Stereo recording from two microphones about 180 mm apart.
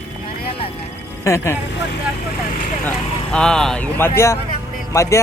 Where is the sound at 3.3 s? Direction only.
5° left (ahead or behind).